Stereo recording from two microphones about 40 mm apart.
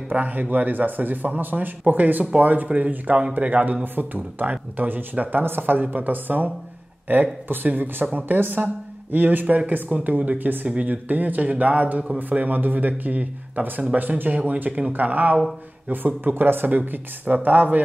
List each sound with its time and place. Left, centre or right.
0.1 s a man's voice: right
3.8 s speech: right
5.4 s a man's voice: right